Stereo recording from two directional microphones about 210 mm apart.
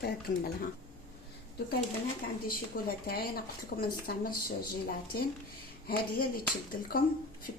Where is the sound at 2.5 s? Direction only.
45° left (ahead or behind).